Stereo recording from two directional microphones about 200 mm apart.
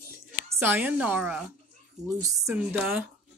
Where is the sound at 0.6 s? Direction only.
10° right (ahead or behind).